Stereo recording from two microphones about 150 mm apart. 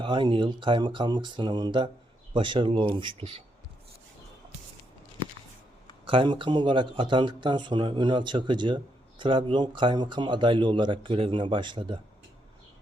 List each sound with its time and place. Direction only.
0.0 s speech: 35° right (ahead or behind)
6.1 s speech: 35° right (ahead or behind)